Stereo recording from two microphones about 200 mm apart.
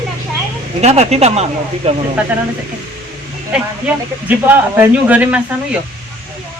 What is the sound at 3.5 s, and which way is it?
Speech, 10° right (ahead or behind).